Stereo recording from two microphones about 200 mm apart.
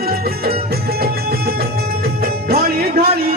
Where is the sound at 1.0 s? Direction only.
50° right (ahead or behind).